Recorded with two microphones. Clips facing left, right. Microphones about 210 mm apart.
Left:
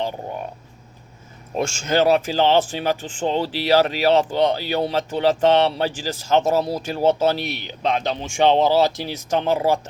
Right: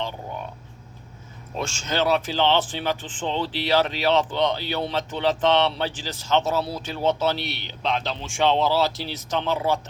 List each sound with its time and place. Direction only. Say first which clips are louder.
1.5 s speech: left 6 dB; 50° left (ahead or behind)
8.0 s speech: left 5 dB; 15° left (ahead or behind)
9.3 s speech: left 5 dB; 45° left (ahead or behind)